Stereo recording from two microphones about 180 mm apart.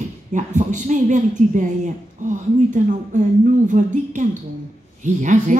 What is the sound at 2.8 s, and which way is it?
A woman's voice, 45° right (ahead or behind).